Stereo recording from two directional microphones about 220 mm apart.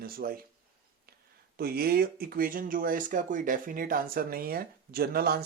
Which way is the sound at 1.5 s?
45° right (ahead or behind).